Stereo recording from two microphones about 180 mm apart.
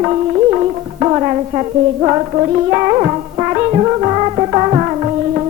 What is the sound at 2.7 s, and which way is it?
Music, 25° right (ahead or behind).